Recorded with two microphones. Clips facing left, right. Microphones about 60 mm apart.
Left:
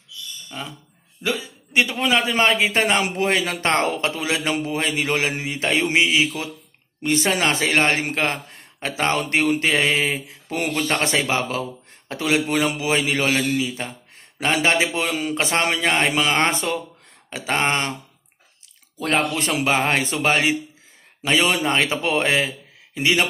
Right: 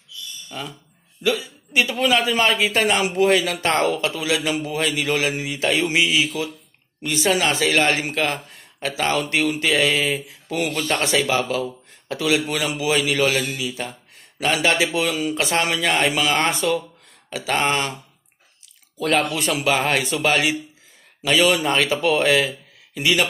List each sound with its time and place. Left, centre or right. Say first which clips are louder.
0.5 s speech: right 1 dB; left
1.2 s mantra: right 3 dB; left
7.0 s speech: even; left
11.0 s mantra: right 1 dB; left
15.0 s speech: right 1 dB; left
18.9 s mantra: right 1 dB; left